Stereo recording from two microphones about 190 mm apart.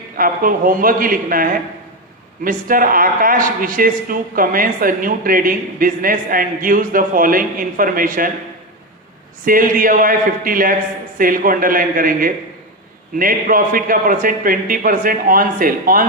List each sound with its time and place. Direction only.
0.2 s a man's voice: 45° right (ahead or behind)
9.4 s a man's voice: 45° right (ahead or behind)